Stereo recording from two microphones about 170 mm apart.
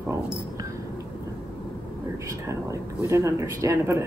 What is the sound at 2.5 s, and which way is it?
Speech, 15° right (ahead or behind).